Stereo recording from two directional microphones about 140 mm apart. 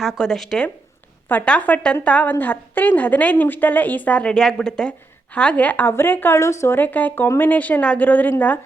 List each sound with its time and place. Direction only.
0.0 s a woman's voice: centre (ahead or behind)